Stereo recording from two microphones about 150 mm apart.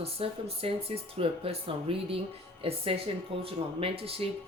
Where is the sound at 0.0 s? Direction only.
40° right (ahead or behind).